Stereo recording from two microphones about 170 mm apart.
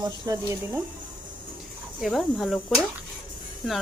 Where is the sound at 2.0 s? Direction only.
Centre (ahead or behind).